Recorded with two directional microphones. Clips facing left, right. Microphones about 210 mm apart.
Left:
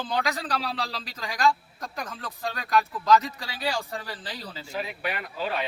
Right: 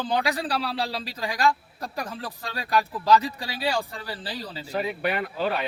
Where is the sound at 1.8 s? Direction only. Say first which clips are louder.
Right 3 dB; 30° right (ahead or behind).